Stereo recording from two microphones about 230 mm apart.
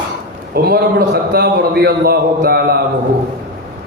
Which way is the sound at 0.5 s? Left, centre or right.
Right.